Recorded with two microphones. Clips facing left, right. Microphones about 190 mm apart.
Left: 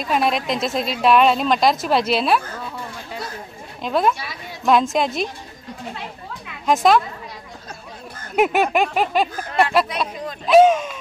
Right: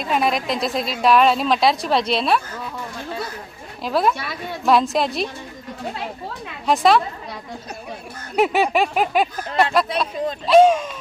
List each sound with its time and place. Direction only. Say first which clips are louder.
0.0 s a woman's voice: even; centre (ahead or behind)
3.8 s a woman's voice: even; 5° right (ahead or behind)
4.2 s a woman's voice: right 5 dB; 60° right (ahead or behind)
4.6 s a woman's voice: even; centre (ahead or behind)
6.6 s a woman's voice: even; centre (ahead or behind)
8.4 s a woman's voice: even; centre (ahead or behind)
10.4 s a woman's voice: even; centre (ahead or behind)